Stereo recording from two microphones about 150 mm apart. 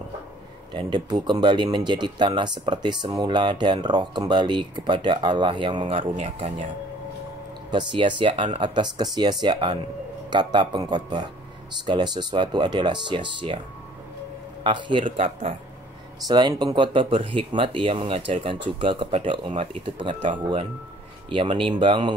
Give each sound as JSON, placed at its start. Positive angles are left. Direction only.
{"t": 0.7, "sound": "speech", "side_deg": -30}
{"t": 7.7, "sound": "speech", "side_deg": -35}
{"t": 14.6, "sound": "speech", "side_deg": -35}
{"t": 16.3, "sound": "speech", "side_deg": -30}